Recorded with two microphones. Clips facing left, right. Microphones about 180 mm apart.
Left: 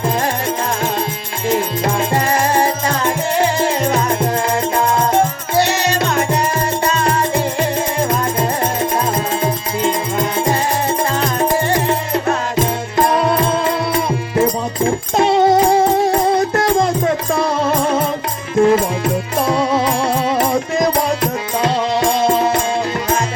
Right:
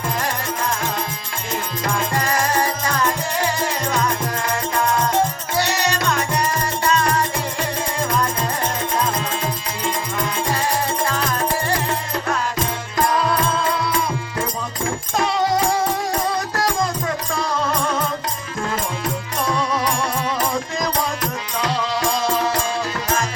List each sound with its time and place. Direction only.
1.5 s music: 25° left (ahead or behind)